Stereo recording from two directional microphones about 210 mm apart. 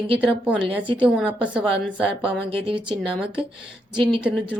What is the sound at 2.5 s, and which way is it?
Speech, 25° right (ahead or behind).